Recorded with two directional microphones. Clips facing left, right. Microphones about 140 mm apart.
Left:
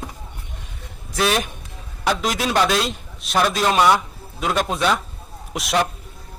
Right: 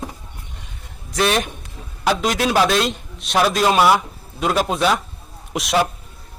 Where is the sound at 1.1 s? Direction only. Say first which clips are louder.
Right 2 dB; centre (ahead or behind).